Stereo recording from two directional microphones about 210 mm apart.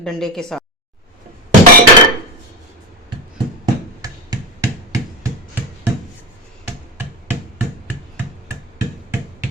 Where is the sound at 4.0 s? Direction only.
15° right (ahead or behind).